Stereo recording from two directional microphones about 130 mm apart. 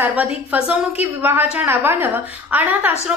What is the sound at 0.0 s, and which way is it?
A woman's voice, 10° right (ahead or behind).